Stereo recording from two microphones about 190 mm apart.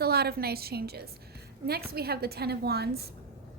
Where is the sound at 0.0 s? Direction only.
55° right (ahead or behind).